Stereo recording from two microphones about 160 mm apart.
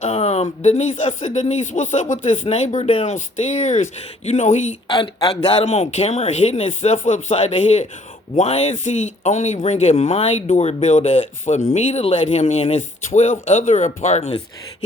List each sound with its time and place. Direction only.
0.0 s speech: 40° left (ahead or behind)
4.9 s a man's voice: 30° left (ahead or behind)
5.6 s speech: 40° left (ahead or behind)
13.1 s speech: 55° left (ahead or behind)